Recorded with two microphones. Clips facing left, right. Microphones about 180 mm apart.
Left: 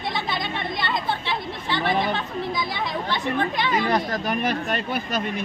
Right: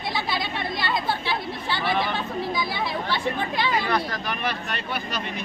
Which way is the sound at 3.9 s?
45° left (ahead or behind).